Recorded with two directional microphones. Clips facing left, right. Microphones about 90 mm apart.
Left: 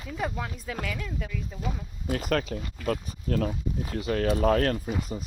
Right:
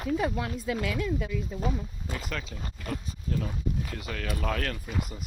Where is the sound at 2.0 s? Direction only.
55° left (ahead or behind).